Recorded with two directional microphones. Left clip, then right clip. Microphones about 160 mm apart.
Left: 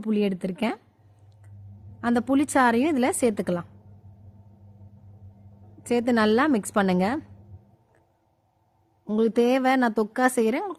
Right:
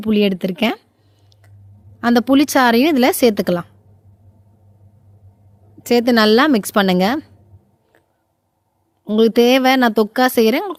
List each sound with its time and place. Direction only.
0.0 s a woman's voice: 50° right (ahead or behind)
2.0 s a woman's voice: 50° right (ahead or behind)
5.8 s a woman's voice: 50° right (ahead or behind)
9.0 s a woman's voice: 45° right (ahead or behind)